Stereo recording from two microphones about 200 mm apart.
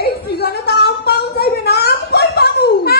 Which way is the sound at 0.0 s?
50° left (ahead or behind).